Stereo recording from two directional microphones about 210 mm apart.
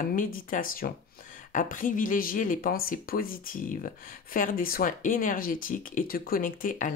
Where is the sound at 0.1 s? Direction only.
40° left (ahead or behind).